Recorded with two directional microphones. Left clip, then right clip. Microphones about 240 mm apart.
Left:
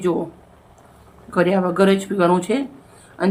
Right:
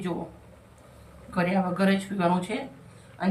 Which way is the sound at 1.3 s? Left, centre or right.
Left.